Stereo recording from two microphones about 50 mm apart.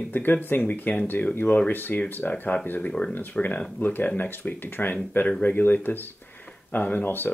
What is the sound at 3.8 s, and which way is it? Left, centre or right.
Speech, left.